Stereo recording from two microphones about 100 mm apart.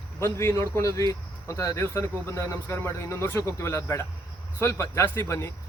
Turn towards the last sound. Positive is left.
turn(degrees=25)  # may be behind; listen again after turning